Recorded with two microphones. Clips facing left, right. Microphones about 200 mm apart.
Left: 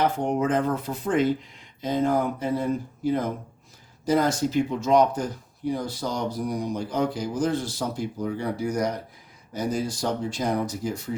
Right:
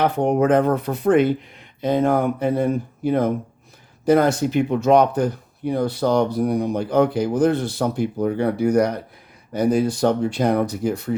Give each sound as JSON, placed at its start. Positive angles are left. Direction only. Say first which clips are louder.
{"t": 0.0, "sound": "speech", "louder": "right 5 dB", "side_deg": -60}